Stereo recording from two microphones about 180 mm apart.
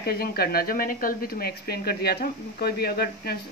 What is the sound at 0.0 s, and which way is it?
Speech, 60° left (ahead or behind).